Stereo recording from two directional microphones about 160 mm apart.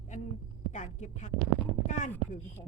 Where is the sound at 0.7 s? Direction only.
50° left (ahead or behind).